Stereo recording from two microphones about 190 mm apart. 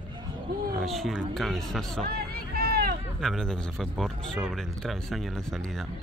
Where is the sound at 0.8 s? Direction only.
Centre (ahead or behind).